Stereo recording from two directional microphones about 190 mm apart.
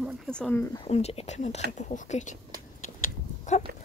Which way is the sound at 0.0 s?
5° left (ahead or behind).